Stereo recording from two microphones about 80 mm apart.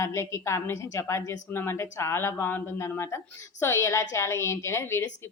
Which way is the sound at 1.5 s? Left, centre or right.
Left.